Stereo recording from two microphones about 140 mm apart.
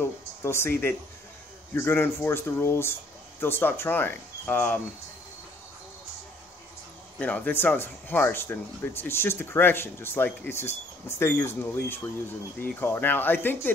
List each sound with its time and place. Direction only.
0.0 s speech: 20° left (ahead or behind)
7.2 s speech: 10° left (ahead or behind)